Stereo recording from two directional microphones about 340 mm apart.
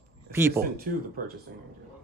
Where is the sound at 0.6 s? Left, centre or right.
Right.